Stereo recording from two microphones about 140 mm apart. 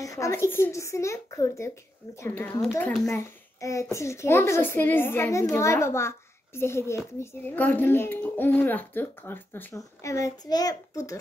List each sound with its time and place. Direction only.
0.0 s a woman's voice: 20° left (ahead or behind)
3.6 s a woman's voice: 20° left (ahead or behind)